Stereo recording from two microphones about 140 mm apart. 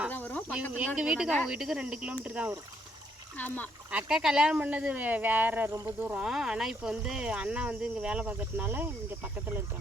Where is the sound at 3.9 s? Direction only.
5° right (ahead or behind).